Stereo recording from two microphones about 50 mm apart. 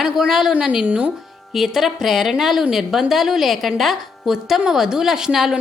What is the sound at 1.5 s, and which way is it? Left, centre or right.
A woman's voice, centre.